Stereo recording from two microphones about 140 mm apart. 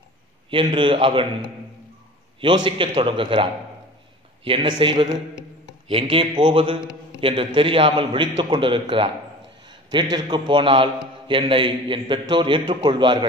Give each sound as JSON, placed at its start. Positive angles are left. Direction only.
{"t": 0.5, "sound": "a man's voice", "side_deg": -35}
{"t": 4.6, "sound": "a man's voice", "side_deg": -35}